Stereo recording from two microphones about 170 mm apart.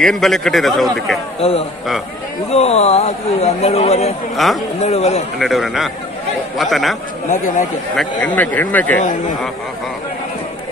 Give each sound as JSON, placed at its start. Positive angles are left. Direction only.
{"t": 0.0, "sound": "a man's voice", "side_deg": 5}
{"t": 1.4, "sound": "speech", "side_deg": 35}
{"t": 5.4, "sound": "a man's voice", "side_deg": 0}
{"t": 7.2, "sound": "a man's voice", "side_deg": 50}
{"t": 7.9, "sound": "speech", "side_deg": 5}